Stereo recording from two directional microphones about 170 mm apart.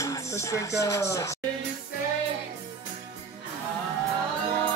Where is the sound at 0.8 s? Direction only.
15° left (ahead or behind).